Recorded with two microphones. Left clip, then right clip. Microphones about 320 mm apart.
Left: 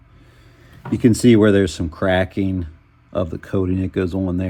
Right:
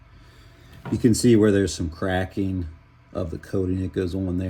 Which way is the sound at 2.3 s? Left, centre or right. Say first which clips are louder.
Left 5 dB; centre.